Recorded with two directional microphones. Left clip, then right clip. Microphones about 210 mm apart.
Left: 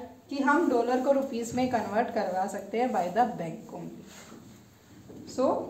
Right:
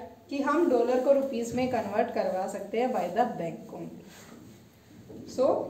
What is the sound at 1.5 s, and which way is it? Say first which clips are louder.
A woman's voice: left 1 dB; 25° left (ahead or behind).